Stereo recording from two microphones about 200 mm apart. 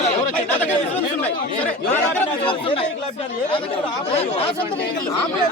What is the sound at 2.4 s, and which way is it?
Speech, 25° left (ahead or behind).